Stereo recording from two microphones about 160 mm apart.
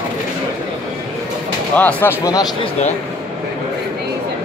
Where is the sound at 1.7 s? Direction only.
10° left (ahead or behind).